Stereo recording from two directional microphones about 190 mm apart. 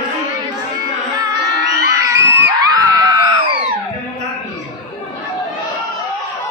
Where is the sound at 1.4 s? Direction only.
60° right (ahead or behind).